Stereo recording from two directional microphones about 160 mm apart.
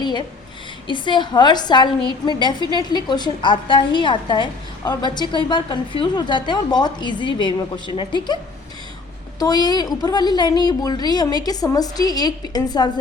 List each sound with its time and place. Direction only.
0.0 s a sound: 25° left (ahead or behind)
0.9 s a woman's voice: 30° left (ahead or behind)
9.4 s a woman's voice: 25° left (ahead or behind)